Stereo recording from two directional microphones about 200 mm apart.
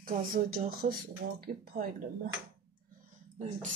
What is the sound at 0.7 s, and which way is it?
Speech, 50° right (ahead or behind).